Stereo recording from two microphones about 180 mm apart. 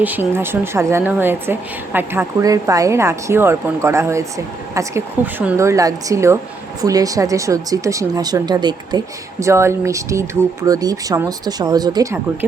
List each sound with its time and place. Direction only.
0.0 s a woman's voice: 10° right (ahead or behind)